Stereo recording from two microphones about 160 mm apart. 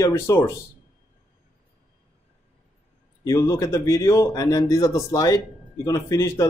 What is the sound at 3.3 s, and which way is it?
Speech, 20° left (ahead or behind).